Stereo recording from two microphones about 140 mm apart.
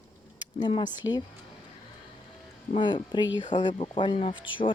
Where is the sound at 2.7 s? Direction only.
35° left (ahead or behind).